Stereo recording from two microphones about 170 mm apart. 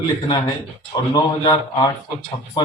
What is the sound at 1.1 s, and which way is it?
Speech, 25° left (ahead or behind).